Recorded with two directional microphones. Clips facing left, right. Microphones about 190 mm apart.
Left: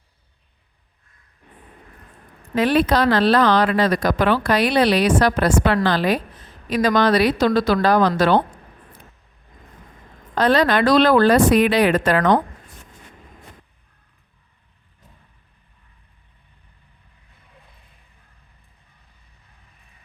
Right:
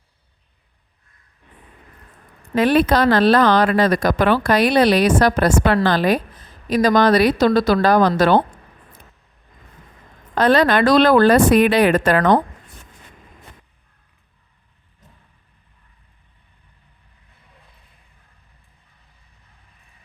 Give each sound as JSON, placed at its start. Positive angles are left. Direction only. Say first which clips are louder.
{"t": 2.6, "sound": "speech", "louder": "right 2 dB", "side_deg": -50}
{"t": 10.3, "sound": "speech", "louder": "right 2 dB", "side_deg": -55}